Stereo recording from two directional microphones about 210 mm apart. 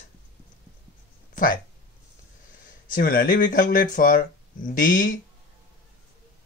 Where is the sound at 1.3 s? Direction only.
40° left (ahead or behind).